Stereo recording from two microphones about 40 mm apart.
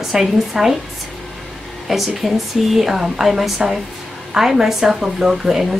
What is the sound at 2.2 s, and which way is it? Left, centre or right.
Speech, centre.